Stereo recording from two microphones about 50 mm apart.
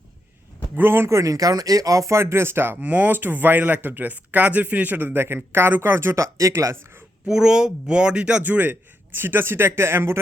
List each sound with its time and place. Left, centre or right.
0.8 s speech: right
1.9 s speech: right
2.8 s speech: right
7.3 s speech: centre
8.4 s speech: right